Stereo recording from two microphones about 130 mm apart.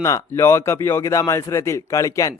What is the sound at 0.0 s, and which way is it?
Speech, 25° left (ahead or behind).